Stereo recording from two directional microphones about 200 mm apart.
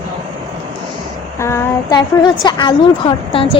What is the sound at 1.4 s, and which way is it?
A woman's voice, 15° left (ahead or behind).